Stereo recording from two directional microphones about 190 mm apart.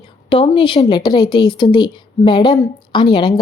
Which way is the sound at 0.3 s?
25° left (ahead or behind).